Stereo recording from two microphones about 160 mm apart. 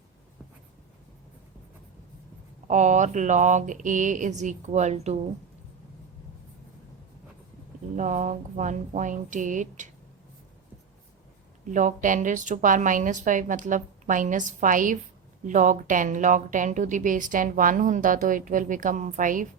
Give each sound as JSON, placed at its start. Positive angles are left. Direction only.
{"t": 2.6, "sound": "speech", "side_deg": -50}
{"t": 7.9, "sound": "speech", "side_deg": -50}
{"t": 11.6, "sound": "speech", "side_deg": -55}